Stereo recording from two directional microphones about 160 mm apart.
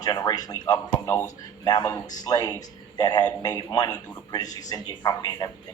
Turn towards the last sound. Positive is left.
turn(degrees=25)  # may be behind; listen again after turning